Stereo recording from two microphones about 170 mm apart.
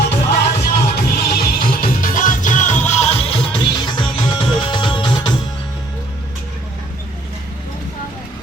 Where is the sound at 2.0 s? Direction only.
50° left (ahead or behind); by 5.3 s 25° left (ahead or behind).